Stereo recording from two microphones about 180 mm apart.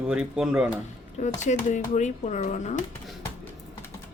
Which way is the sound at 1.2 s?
45° left (ahead or behind).